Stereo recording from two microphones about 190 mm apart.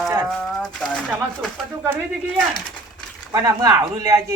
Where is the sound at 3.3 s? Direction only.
20° right (ahead or behind).